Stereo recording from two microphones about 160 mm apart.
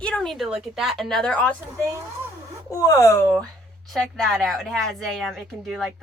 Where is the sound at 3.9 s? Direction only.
Centre (ahead or behind).